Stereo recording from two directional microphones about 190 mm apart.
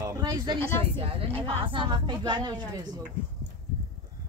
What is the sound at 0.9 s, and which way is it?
Speech, 30° right (ahead or behind).